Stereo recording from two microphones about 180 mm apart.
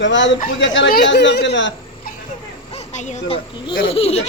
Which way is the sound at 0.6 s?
80° left.